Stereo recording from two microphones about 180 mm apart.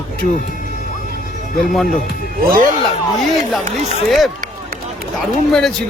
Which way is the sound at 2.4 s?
55° right (ahead or behind).